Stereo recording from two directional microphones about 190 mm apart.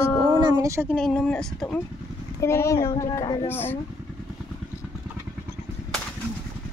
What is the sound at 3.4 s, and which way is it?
Speech, 10° left (ahead or behind).